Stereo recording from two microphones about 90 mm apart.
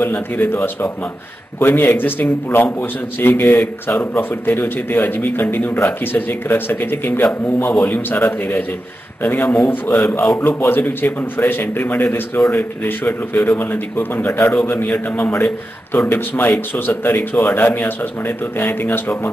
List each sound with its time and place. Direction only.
0.0 s a man's voice: 25° left (ahead or behind)